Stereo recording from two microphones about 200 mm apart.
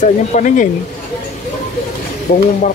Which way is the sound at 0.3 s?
40° left (ahead or behind).